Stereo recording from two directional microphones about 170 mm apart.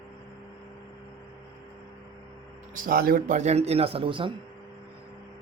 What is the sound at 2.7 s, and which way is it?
Speech, 60° right (ahead or behind).